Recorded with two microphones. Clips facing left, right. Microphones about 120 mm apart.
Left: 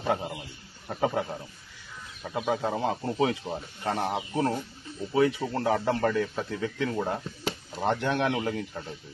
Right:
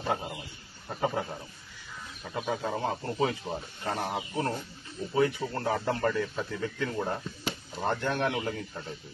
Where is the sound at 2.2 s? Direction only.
75° left (ahead or behind).